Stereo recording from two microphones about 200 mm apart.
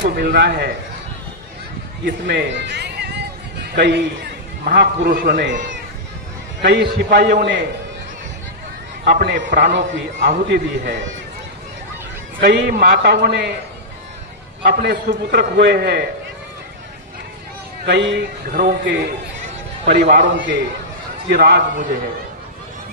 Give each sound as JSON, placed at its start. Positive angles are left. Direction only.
{"t": 0.0, "sound": "a man's voice", "side_deg": -50}
{"t": 2.0, "sound": "a sound", "side_deg": -55}
{"t": 4.6, "sound": "a man's voice", "side_deg": -45}
{"t": 6.6, "sound": "a man's voice", "side_deg": -55}
{"t": 9.0, "sound": "a man's voice", "side_deg": -50}
{"t": 12.4, "sound": "a man's voice", "side_deg": -50}
{"t": 14.6, "sound": "a man's voice", "side_deg": -50}
{"t": 17.8, "sound": "a man's voice", "side_deg": -55}
{"t": 18.5, "sound": "a man's voice", "side_deg": -45}
{"t": 19.9, "sound": "a man's voice", "side_deg": -50}
{"t": 21.3, "sound": "a man's voice", "side_deg": -55}